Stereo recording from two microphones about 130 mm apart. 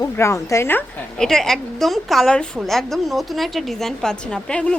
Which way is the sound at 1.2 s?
5° left (ahead or behind).